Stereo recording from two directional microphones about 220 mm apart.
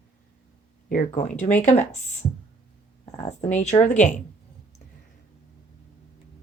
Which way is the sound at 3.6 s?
30° left (ahead or behind).